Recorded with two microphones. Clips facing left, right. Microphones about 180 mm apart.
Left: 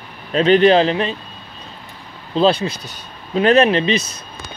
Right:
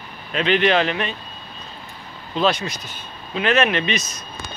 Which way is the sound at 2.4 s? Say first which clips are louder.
Left 5 dB; 30° left (ahead or behind).